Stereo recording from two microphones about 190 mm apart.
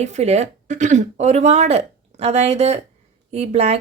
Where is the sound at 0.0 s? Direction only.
35° right (ahead or behind).